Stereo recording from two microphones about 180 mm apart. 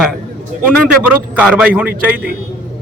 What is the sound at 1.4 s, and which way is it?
Speech, 5° right (ahead or behind).